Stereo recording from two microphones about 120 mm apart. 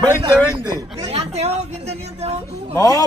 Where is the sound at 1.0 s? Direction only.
55° right (ahead or behind).